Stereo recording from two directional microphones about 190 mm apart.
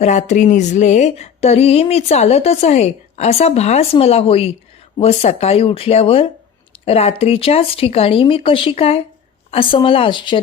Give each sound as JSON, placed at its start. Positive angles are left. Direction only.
{"t": 0.0, "sound": "a woman's voice", "side_deg": 35}